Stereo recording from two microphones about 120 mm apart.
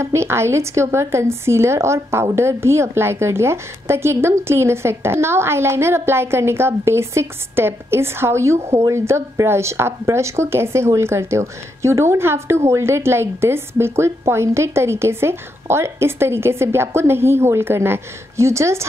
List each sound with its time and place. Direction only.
0.0 s a woman's voice: 20° right (ahead or behind)